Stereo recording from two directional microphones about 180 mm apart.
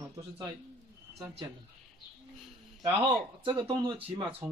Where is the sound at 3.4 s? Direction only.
25° right (ahead or behind).